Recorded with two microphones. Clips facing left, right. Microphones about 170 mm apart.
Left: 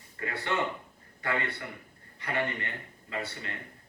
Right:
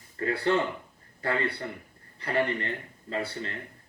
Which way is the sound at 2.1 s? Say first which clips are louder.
Right 5 dB; 35° right (ahead or behind).